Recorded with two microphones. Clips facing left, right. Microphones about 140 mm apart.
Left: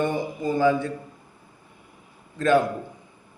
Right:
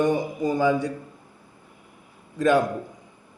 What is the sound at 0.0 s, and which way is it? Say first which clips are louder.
Speech: right 3 dB; 15° right (ahead or behind).